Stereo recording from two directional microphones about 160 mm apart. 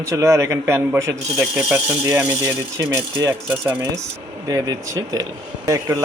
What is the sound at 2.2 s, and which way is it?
Speech, 25° right (ahead or behind).